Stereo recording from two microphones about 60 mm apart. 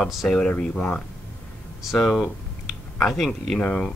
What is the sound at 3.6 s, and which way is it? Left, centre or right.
Speech, left.